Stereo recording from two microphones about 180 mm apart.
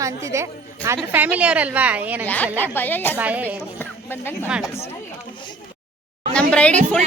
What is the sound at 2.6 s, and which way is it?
Speech, 10° left (ahead or behind).